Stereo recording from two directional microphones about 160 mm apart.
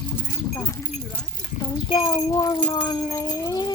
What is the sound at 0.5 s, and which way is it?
Speech, 20° left (ahead or behind).